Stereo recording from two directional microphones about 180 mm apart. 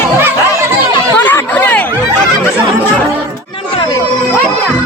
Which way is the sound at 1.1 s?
10° left (ahead or behind).